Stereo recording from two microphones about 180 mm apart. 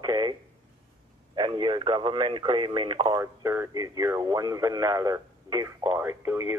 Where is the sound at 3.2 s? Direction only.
15° right (ahead or behind).